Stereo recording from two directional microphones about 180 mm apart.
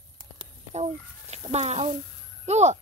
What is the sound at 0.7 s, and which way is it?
Speech, 35° right (ahead or behind).